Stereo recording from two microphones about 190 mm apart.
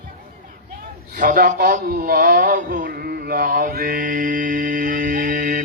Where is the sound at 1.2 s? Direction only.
45° right (ahead or behind).